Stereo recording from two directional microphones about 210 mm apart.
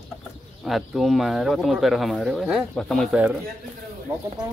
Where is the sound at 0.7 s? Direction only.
Centre (ahead or behind).